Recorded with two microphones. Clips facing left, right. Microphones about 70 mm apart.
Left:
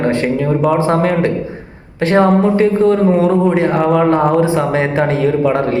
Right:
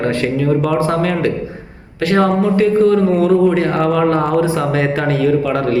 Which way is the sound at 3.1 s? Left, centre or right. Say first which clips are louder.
Even; centre.